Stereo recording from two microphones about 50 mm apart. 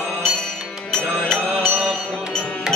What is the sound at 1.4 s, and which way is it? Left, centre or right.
Mantra, left.